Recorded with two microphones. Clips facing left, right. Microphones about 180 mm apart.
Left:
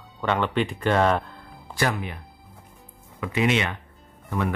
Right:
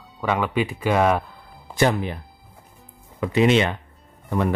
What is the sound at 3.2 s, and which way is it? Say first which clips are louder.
Speech: right 6 dB; 30° right (ahead or behind).